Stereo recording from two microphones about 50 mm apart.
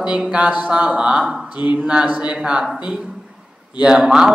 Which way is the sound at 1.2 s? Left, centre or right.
Centre.